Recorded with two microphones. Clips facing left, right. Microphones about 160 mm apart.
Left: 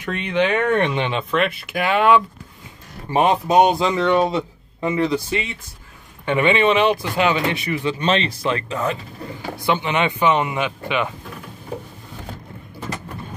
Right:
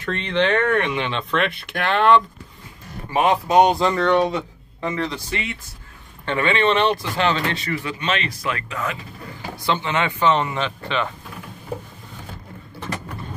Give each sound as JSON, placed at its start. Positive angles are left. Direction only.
{"t": 0.0, "sound": "speech", "side_deg": 10}
{"t": 1.3, "sound": "speech", "side_deg": 0}
{"t": 3.1, "sound": "speech", "side_deg": 25}
{"t": 3.8, "sound": "speech", "side_deg": 5}
{"t": 8.0, "sound": "speech", "side_deg": 30}
{"t": 9.7, "sound": "speech", "side_deg": 15}